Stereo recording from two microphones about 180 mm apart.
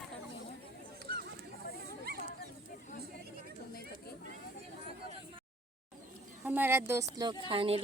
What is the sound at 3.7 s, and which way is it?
Chatter, 60° left (ahead or behind).